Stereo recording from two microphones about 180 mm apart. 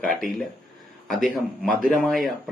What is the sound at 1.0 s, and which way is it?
Speech, centre (ahead or behind).